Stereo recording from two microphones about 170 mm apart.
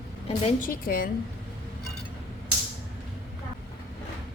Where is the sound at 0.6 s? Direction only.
60° left (ahead or behind).